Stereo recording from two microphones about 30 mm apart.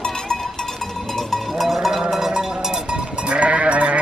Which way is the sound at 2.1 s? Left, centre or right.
Centre.